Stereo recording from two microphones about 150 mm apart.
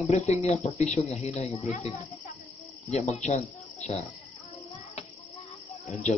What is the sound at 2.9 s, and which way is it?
Speech, 50° left (ahead or behind).